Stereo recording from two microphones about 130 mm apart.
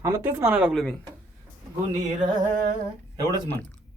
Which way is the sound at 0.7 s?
Centre (ahead or behind).